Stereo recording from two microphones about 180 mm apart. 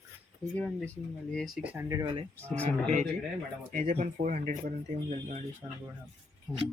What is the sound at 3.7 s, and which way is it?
Speech, 45° right (ahead or behind).